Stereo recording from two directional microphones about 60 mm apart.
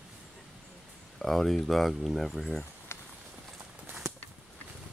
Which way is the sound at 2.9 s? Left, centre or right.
Left.